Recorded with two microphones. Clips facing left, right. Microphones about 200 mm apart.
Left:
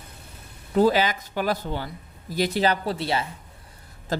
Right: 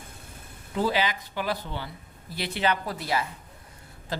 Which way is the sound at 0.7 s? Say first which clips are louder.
Left 6 dB; 45° left (ahead or behind).